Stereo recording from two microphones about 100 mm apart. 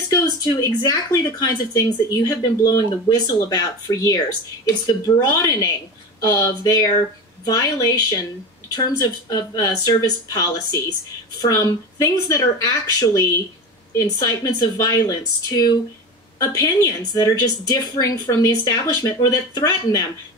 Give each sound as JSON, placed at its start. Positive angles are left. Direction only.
{"t": 0.1, "sound": "speech", "side_deg": 40}